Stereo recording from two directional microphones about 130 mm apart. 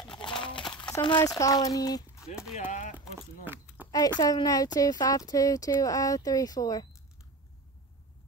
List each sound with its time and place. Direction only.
0.0 s crumpling: 35° left (ahead or behind)
2.5 s speech: 75° left (ahead or behind)
3.4 s a sound: 10° right (ahead or behind)
3.9 s speech: 30° left (ahead or behind)